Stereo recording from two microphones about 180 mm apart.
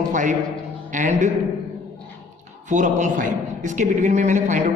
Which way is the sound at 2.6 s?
45° right (ahead or behind).